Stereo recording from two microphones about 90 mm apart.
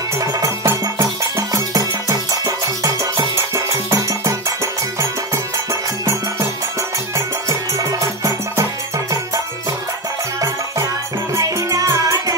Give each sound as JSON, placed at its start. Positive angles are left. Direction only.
{"t": 0.2, "sound": "music", "side_deg": -35}
{"t": 7.2, "sound": "music", "side_deg": -35}
{"t": 11.3, "sound": "music", "side_deg": -40}